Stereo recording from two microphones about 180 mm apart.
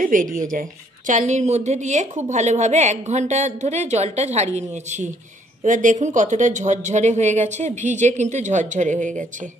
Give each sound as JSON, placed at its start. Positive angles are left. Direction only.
{"t": 0.0, "sound": "a woman's voice", "side_deg": -50}